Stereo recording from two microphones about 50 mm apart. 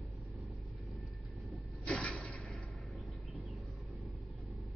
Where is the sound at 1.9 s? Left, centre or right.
Left.